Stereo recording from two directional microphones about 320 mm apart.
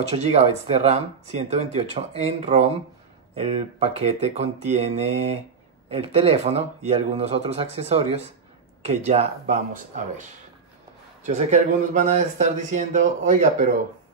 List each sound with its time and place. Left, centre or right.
0.1 s speech: centre
11.2 s speech: right